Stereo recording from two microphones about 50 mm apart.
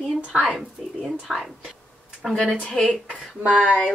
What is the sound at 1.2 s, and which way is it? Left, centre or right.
Speech, centre.